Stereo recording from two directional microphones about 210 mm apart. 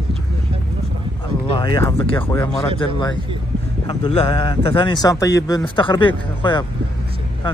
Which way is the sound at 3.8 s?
20° left (ahead or behind).